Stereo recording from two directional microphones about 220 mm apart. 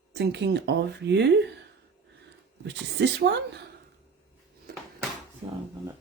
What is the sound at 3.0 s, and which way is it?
Speech, 50° right (ahead or behind).